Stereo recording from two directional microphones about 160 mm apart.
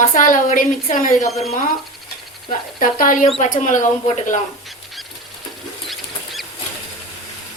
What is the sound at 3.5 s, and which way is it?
Speech, 50° left (ahead or behind).